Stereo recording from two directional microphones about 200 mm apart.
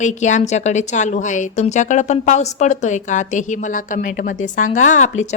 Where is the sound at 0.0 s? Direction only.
35° left (ahead or behind).